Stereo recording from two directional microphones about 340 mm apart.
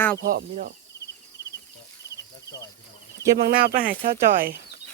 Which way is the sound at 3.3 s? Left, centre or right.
Right.